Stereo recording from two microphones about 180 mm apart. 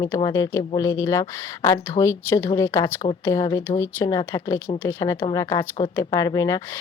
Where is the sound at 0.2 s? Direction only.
20° left (ahead or behind).